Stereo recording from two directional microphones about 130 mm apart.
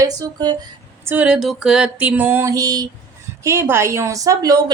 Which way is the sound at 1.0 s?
10° right (ahead or behind).